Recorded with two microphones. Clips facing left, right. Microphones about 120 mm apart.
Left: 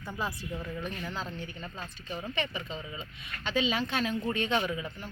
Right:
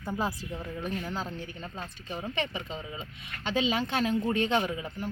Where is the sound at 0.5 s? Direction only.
20° right (ahead or behind).